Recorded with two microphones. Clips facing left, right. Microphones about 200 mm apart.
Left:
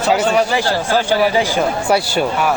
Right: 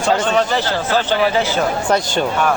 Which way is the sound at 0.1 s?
10° left (ahead or behind).